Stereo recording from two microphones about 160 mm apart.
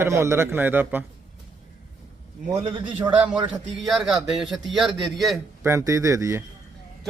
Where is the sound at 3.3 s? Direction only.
30° right (ahead or behind).